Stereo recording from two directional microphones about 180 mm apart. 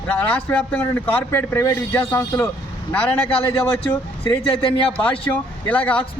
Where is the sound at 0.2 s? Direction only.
10° left (ahead or behind).